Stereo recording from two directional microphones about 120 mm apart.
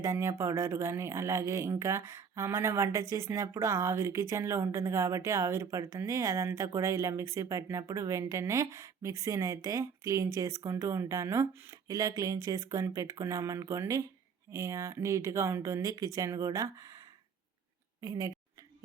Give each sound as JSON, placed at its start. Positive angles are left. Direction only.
{"t": 0.0, "sound": "speech", "side_deg": -25}
{"t": 18.0, "sound": "a woman's voice", "side_deg": -30}